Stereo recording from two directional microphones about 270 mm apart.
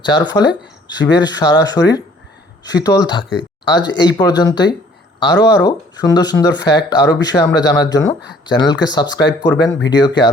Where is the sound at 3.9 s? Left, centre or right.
Left.